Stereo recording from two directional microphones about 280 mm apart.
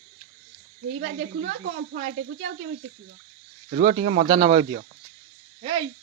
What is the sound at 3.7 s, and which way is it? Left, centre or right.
Speech, right.